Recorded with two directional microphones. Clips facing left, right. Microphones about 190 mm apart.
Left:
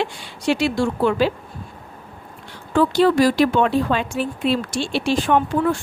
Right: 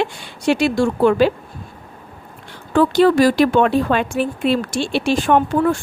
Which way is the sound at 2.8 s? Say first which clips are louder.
Right 3 dB; 55° right (ahead or behind).